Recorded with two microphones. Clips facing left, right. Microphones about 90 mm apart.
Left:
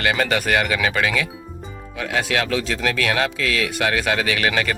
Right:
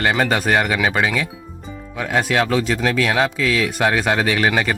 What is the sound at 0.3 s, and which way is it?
Speech, 30° right (ahead or behind).